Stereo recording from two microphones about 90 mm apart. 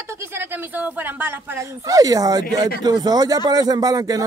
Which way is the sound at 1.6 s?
40° right (ahead or behind).